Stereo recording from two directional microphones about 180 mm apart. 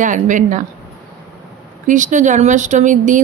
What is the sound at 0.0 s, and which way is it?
Speech, 45° right (ahead or behind).